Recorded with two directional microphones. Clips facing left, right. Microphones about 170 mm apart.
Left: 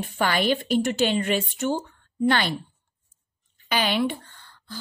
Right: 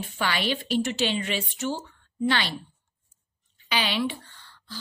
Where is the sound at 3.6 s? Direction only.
50° left (ahead or behind).